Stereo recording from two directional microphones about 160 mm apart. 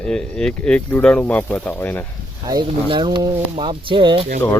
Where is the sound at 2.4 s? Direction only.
25° right (ahead or behind).